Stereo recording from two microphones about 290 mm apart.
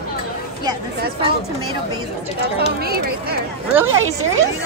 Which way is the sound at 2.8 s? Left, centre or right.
Right.